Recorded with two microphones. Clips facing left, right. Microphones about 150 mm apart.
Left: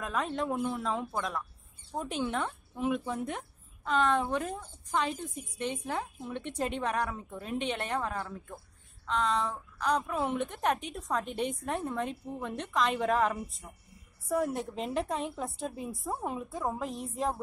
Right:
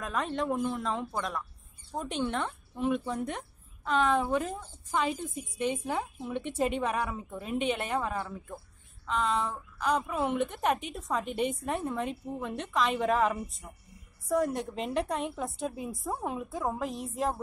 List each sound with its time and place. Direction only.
0.0 s speech: centre (ahead or behind)